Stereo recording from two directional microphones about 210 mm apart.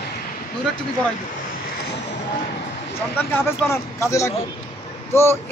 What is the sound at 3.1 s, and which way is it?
Speech, 10° left (ahead or behind).